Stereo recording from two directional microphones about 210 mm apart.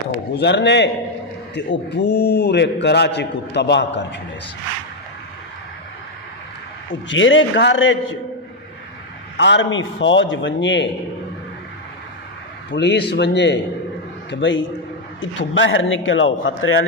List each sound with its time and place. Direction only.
0.3 s a man's voice: 55° left (ahead or behind)
7.1 s a man's voice: 65° left (ahead or behind)
9.4 s a man's voice: 60° left (ahead or behind)
12.7 s a man's voice: 55° left (ahead or behind); by 16.8 s 70° left (ahead or behind)